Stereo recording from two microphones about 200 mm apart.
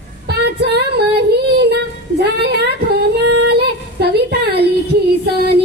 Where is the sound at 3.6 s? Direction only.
55° right (ahead or behind).